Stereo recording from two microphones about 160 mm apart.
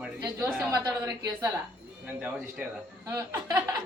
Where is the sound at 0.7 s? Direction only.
25° right (ahead or behind).